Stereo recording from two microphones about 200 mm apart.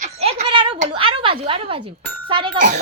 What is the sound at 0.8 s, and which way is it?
Speech, 25° right (ahead or behind).